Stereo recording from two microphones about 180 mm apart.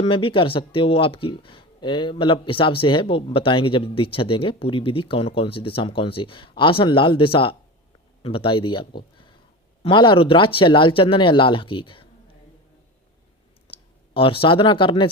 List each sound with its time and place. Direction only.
0.0 s speech: 30° left (ahead or behind)
9.0 s a sound: 30° left (ahead or behind)
9.8 s speech: 25° left (ahead or behind)
13.7 s speech: 30° left (ahead or behind)